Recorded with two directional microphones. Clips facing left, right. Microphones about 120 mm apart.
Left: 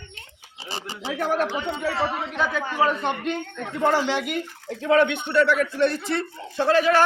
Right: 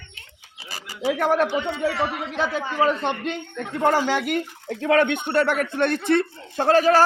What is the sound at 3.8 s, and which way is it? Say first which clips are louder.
Speech: right 1 dB; 45° right (ahead or behind).